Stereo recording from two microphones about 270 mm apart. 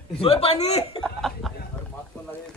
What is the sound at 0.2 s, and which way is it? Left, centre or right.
Speech, left.